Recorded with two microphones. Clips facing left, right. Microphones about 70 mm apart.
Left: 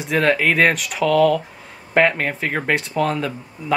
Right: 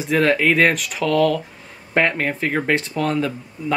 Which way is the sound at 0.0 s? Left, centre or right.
Centre.